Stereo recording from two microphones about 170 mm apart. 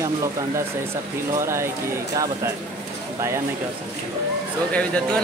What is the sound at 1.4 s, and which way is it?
Speech, 15° right (ahead or behind).